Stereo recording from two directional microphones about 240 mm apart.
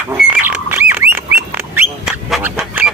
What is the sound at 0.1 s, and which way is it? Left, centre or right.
Pig, centre.